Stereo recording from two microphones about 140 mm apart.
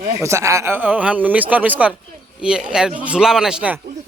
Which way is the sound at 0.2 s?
20° right (ahead or behind).